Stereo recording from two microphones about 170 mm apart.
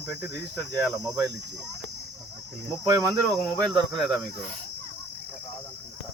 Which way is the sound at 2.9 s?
20° right (ahead or behind).